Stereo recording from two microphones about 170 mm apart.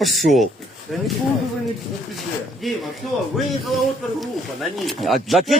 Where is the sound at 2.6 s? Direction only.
Centre (ahead or behind).